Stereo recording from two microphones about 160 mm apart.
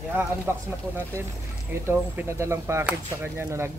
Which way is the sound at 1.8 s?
15° right (ahead or behind).